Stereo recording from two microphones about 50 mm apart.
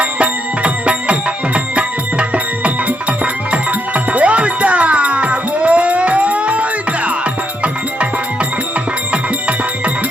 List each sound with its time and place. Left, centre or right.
0.0 s music: right